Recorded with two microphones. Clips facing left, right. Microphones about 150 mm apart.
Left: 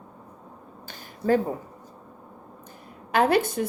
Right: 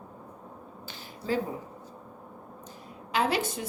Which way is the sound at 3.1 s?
55° left (ahead or behind).